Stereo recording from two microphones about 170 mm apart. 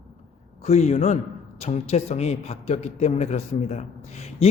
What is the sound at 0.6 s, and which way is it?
A man's voice, 40° left (ahead or behind).